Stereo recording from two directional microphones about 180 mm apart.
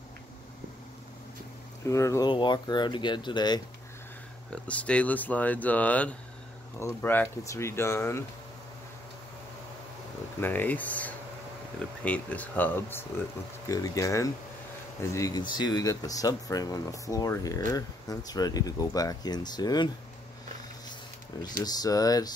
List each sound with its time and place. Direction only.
1.9 s speech: 15° left (ahead or behind)
4.5 s speech: 5° left (ahead or behind)
10.4 s speech: 10° left (ahead or behind)
21.6 s speech: 20° left (ahead or behind)